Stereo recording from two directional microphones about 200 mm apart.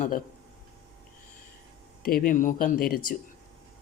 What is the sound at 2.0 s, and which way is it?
Speech, 45° left (ahead or behind).